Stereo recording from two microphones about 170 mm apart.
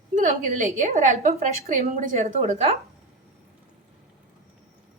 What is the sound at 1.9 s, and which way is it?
Speech, 45° right (ahead or behind).